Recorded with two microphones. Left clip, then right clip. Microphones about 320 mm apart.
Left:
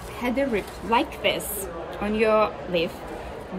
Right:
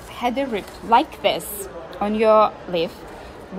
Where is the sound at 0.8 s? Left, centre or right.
Right.